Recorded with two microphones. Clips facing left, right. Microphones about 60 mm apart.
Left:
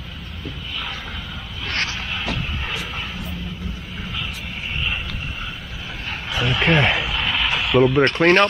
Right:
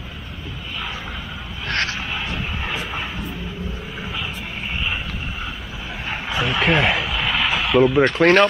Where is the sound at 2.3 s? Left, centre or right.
Centre.